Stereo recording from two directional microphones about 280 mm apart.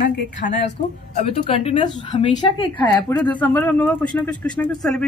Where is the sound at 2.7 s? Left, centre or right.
Centre.